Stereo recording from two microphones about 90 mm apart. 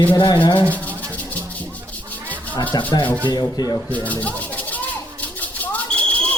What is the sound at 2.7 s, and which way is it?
Speech, 50° left (ahead or behind).